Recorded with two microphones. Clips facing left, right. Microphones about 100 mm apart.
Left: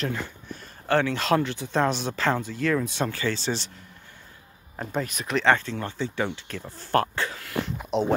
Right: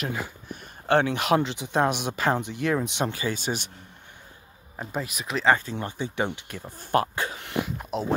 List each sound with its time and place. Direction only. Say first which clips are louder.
0.0 s speech: left 1 dB; 10° right (ahead or behind)
4.7 s speech: left 2 dB; 5° right (ahead or behind); by 7.5 s 20° right (ahead or behind)
7.6 s speech: left 4 dB; 5° right (ahead or behind)